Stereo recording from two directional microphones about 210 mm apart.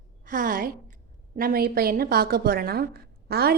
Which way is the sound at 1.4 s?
45° right (ahead or behind).